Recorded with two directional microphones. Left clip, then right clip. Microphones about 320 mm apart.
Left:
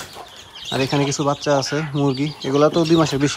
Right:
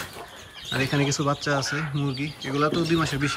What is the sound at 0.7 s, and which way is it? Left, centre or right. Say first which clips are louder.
Speech: left 5 dB; centre.